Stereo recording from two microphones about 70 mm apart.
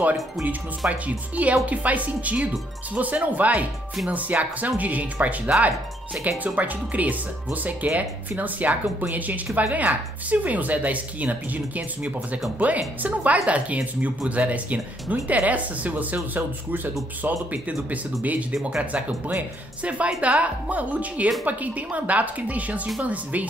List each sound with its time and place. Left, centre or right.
0.0 s speech: right